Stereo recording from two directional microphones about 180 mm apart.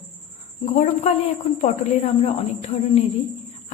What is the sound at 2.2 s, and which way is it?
Speech, 35° left (ahead or behind).